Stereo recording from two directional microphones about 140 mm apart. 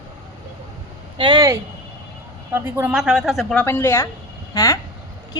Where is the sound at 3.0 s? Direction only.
5° right (ahead or behind).